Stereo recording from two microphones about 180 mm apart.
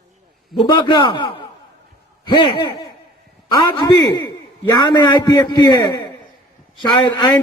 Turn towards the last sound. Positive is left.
turn(degrees=25)  # may be behind; listen again after turning